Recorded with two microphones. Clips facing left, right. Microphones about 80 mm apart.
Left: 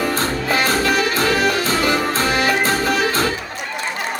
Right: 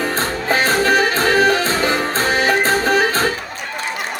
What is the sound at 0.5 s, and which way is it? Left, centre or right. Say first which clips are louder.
Music: right 3 dB; right.